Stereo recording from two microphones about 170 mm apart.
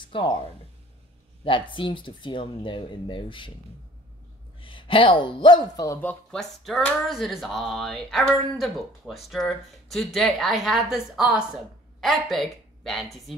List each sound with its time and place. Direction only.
0.1 s speech: 30° left (ahead or behind)
1.4 s speech: 30° left (ahead or behind)
4.6 s a man's voice: 30° left (ahead or behind)
5.9 s speech: 5° left (ahead or behind)